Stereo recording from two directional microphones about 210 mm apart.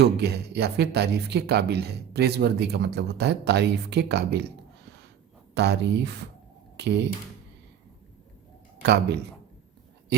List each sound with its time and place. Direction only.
0.0 s speech: 50° right (ahead or behind)
8.8 s speech: 50° right (ahead or behind)